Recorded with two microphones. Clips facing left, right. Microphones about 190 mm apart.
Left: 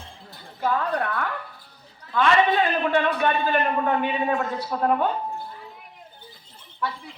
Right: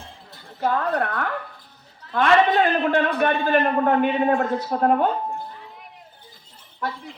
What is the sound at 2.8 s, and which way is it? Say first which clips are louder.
Speech: right 2 dB; 50° right (ahead or behind).